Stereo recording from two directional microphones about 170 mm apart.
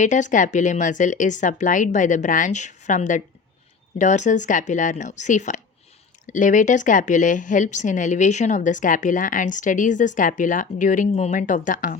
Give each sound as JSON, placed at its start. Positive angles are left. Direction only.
{"t": 0.0, "sound": "a woman's voice", "side_deg": 45}